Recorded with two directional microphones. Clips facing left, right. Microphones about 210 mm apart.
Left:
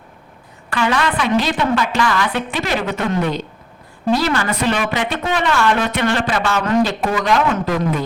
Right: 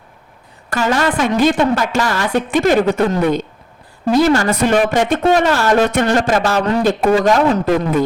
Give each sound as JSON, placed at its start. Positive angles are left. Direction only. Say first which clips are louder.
{"t": 0.7, "sound": "a woman's voice", "louder": "right 2 dB", "side_deg": -40}